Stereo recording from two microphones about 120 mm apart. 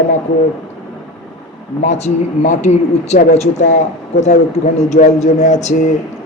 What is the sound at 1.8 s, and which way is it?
A man's voice, 70° left (ahead or behind).